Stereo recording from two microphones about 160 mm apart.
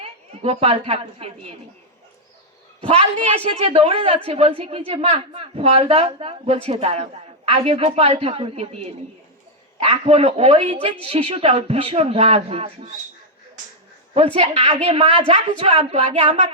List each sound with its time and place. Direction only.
0.0 s a woman's voice: 40° right (ahead or behind)
3.3 s a man's voice: 40° right (ahead or behind)
14.1 s a man's voice: 40° right (ahead or behind)